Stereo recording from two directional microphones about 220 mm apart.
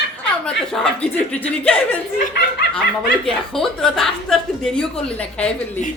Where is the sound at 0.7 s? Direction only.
Centre (ahead or behind).